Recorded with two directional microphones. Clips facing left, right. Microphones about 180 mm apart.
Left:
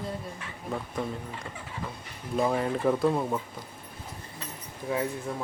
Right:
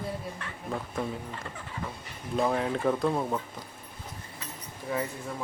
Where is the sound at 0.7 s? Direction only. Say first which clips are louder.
Left 1 dB; centre (ahead or behind).